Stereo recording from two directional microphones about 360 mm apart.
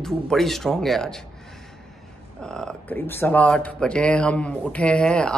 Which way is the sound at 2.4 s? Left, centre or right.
Centre.